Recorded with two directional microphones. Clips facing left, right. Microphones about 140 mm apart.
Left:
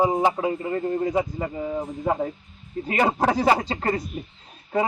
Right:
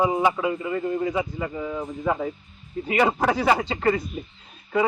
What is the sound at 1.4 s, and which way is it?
Speech, 30° left (ahead or behind).